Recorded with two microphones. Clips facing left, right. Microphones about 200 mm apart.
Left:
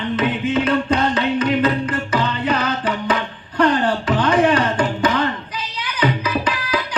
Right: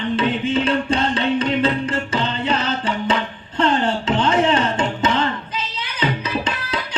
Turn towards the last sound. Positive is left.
turn(degrees=-25)  # may be behind; listen again after turning